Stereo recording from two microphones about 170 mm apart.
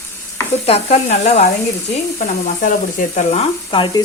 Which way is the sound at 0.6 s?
40° left (ahead or behind).